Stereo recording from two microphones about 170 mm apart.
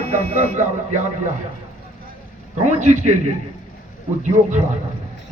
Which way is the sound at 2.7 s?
45° right (ahead or behind).